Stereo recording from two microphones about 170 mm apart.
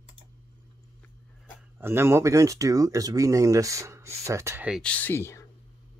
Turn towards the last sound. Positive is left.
turn(degrees=15)  # may be behind; listen again after turning